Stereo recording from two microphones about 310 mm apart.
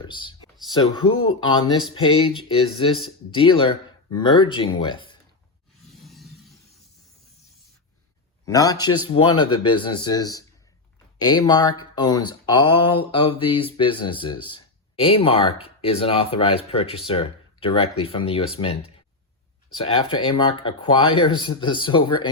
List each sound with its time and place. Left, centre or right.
0.0 s speech: centre
5.8 s a sound: centre
8.4 s speech: centre